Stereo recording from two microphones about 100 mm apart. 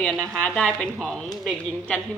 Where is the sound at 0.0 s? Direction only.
15° left (ahead or behind).